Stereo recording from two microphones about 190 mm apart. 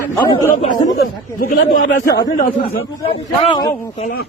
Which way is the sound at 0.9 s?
45° left (ahead or behind).